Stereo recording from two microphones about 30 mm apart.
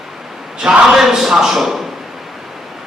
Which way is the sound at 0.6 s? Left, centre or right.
Centre.